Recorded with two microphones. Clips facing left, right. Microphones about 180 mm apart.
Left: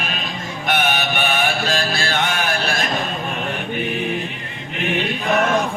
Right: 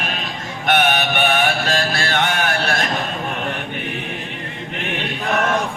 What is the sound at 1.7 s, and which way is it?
Music, 55° right (ahead or behind).